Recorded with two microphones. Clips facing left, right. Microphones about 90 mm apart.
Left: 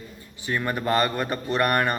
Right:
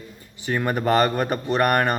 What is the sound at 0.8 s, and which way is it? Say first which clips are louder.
Mantra: right 4 dB; 40° right (ahead or behind).